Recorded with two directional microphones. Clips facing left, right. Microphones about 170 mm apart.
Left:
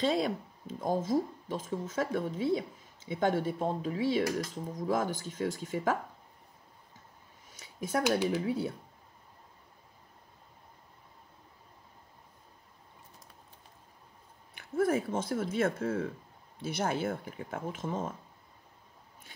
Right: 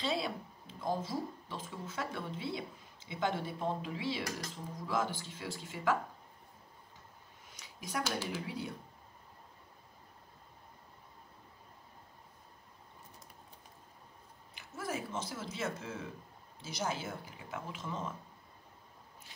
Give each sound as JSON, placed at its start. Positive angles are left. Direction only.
{"t": 0.0, "sound": "speech", "side_deg": 45}
{"t": 7.5, "sound": "a sound", "side_deg": 50}
{"t": 14.5, "sound": "speech", "side_deg": 55}